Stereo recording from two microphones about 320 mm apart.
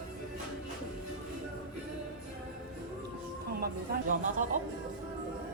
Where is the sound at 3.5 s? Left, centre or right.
Right.